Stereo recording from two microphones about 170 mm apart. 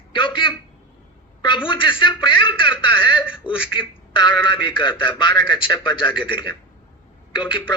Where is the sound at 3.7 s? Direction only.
25° left (ahead or behind).